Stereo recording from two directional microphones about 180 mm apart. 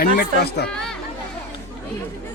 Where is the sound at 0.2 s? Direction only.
65° left (ahead or behind).